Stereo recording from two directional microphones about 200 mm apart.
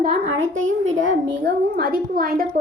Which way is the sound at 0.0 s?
40° right (ahead or behind).